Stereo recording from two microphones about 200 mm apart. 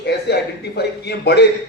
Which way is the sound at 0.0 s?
55° left (ahead or behind).